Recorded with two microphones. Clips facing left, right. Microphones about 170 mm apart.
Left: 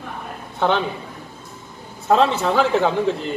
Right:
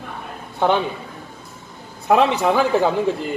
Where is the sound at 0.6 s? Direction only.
15° right (ahead or behind).